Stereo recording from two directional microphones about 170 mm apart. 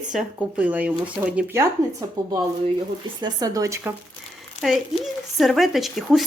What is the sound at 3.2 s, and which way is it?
Speech, 25° right (ahead or behind).